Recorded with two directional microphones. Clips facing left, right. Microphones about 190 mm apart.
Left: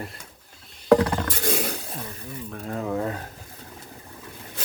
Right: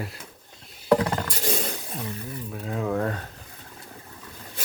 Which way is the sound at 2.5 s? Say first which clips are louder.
Right 1 dB; centre (ahead or behind).